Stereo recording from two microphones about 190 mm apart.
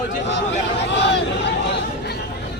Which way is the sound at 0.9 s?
65° left (ahead or behind).